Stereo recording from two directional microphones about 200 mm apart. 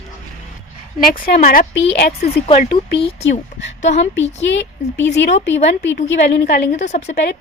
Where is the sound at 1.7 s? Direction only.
60° left (ahead or behind).